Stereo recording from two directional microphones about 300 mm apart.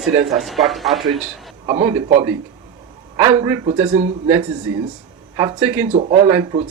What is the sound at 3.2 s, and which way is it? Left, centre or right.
Speech, centre.